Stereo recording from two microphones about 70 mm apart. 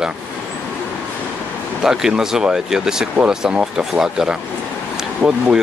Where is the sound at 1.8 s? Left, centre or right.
Centre.